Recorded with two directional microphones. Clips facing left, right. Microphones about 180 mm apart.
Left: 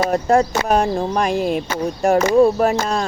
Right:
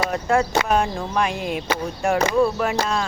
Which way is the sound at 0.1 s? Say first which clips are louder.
Left 4 dB; 40° left (ahead or behind).